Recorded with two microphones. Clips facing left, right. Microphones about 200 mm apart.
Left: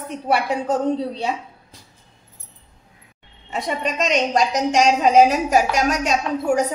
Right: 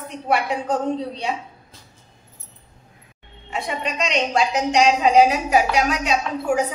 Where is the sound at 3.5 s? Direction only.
40° left (ahead or behind).